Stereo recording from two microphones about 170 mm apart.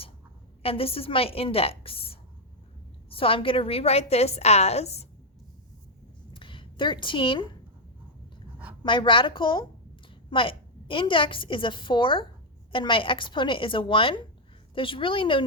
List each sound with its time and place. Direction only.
0.6 s a woman's voice: 35° left (ahead or behind)
3.2 s a woman's voice: 30° left (ahead or behind)
6.3 s a sound: 30° left (ahead or behind)
8.8 s a woman's voice: 30° left (ahead or behind)